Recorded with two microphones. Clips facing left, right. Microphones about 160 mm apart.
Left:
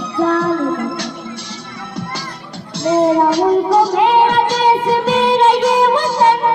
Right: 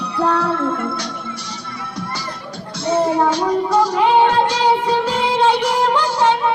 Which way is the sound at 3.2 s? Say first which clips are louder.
Left 4 dB; 35° left (ahead or behind).